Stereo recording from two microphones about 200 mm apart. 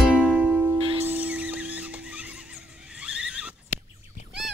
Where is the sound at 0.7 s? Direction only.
25° right (ahead or behind).